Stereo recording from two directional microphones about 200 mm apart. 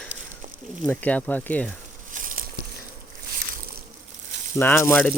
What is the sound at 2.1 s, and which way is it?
Patter, 45° right (ahead or behind).